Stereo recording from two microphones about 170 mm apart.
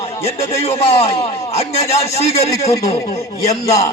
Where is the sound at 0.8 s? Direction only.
35° left (ahead or behind).